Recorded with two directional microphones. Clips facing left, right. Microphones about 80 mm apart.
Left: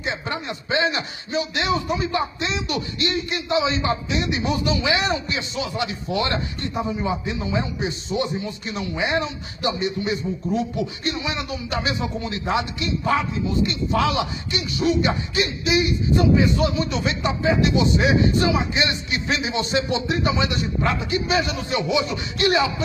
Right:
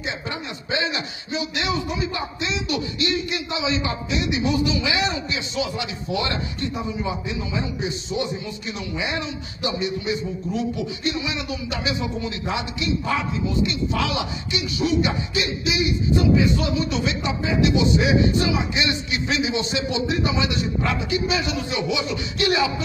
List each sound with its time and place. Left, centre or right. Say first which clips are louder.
0.0 s a man's voice: left 2 dB; left